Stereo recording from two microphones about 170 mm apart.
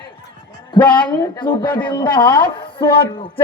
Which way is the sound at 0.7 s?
25° left (ahead or behind).